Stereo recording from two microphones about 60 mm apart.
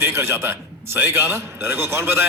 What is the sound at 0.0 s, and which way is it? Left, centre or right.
A man's voice, right.